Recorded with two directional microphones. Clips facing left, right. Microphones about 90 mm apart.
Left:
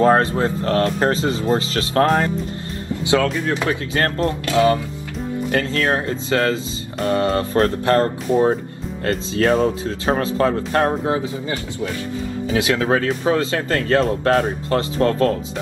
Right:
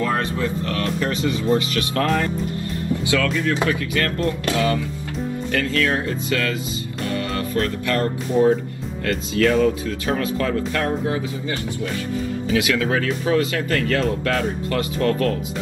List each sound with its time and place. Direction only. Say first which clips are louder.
0.0 s speech: left 7 dB; 35° left (ahead or behind)